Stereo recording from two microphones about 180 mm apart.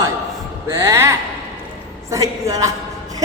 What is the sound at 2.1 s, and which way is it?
Speech, 20° right (ahead or behind).